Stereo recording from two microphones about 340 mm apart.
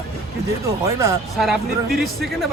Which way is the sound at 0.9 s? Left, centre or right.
Centre.